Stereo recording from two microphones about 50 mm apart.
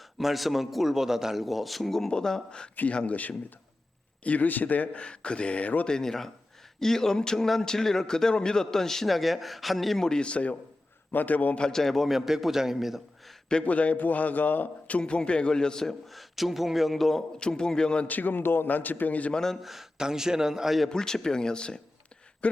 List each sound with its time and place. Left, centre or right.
0.2 s a man's voice: centre
2.9 s a man's voice: left
5.0 s a man's voice: left
5.9 s speech: centre
10.1 s a man's voice: left
11.1 s a man's voice: left
11.6 s a man's voice: centre
13.7 s a man's voice: left; by 16.0 s centre
16.1 s a man's voice: centre
17.3 s speech: centre
18.1 s a man's voice: left
19.3 s speech: centre
19.6 s a man's voice: centre
20.9 s speech: centre